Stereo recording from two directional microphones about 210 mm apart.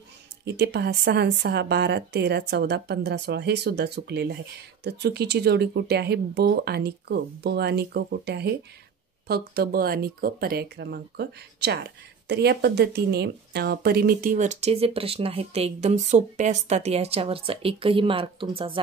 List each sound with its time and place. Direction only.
0.5 s speech: 50° right (ahead or behind); by 18.5 s 25° right (ahead or behind)